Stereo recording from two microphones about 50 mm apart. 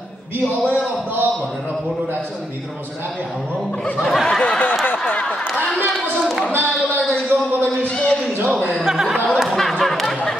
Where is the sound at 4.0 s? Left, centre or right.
Centre.